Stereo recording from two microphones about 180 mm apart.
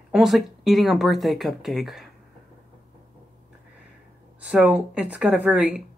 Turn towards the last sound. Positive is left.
turn(degrees=-5)  # may be behind; listen again after turning